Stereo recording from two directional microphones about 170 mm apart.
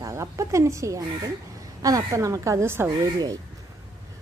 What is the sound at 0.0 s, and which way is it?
A woman's voice, 20° right (ahead or behind).